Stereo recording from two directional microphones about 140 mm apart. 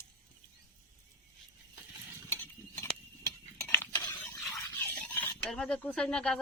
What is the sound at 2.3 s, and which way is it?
Stir, 15° left (ahead or behind).